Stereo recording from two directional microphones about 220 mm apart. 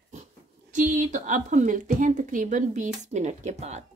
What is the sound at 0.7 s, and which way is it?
A woman's voice, 35° right (ahead or behind).